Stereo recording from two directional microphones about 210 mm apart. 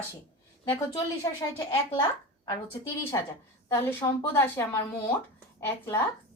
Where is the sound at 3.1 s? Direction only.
15° left (ahead or behind).